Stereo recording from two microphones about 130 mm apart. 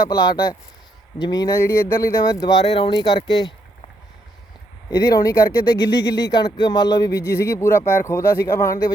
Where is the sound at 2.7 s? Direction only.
40° left (ahead or behind).